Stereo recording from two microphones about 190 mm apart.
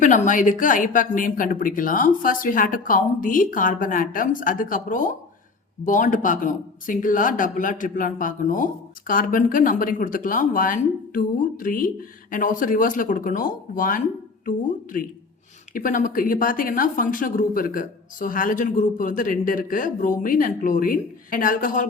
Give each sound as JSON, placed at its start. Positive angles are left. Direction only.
{"t": 0.0, "sound": "speech", "side_deg": 40}
{"t": 15.7, "sound": "speech", "side_deg": 45}